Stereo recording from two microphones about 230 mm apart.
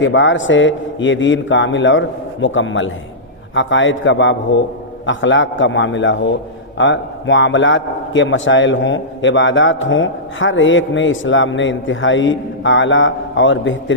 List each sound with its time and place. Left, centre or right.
0.0 s a man's voice: left